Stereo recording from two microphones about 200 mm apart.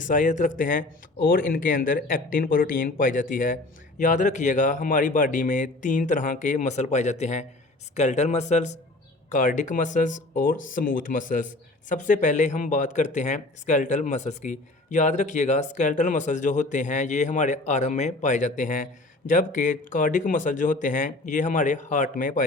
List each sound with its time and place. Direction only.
0.1 s speech: 40° left (ahead or behind)